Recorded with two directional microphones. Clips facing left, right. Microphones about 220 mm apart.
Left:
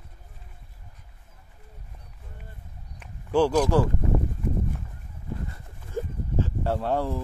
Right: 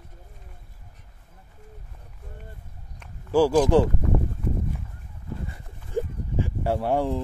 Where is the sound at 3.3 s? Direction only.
10° right (ahead or behind).